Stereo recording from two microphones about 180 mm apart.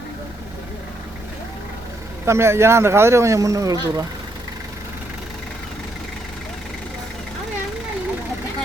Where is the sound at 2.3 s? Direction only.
15° right (ahead or behind).